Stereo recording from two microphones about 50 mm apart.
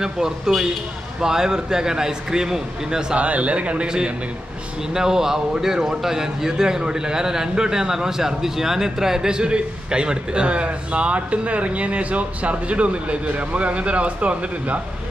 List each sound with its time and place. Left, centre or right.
0.0 s a man's voice: centre
3.2 s a man's voice: right